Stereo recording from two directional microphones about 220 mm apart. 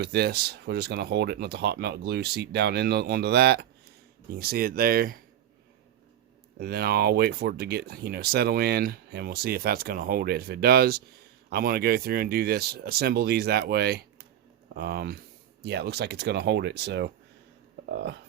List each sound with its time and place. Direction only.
0.0 s speech: 45° right (ahead or behind)
6.6 s speech: 45° right (ahead or behind)